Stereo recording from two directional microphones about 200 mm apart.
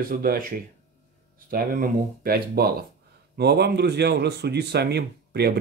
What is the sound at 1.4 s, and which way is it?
Speech, 45° right (ahead or behind).